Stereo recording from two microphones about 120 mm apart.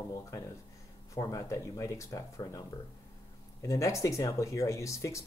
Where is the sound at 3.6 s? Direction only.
25° left (ahead or behind).